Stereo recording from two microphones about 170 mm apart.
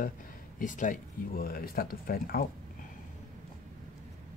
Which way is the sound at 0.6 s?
50° left (ahead or behind).